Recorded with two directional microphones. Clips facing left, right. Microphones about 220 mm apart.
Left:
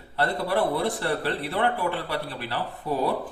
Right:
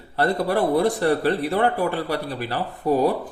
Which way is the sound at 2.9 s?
40° right (ahead or behind).